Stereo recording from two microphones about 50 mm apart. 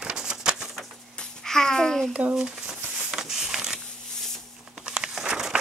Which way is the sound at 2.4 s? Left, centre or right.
Centre.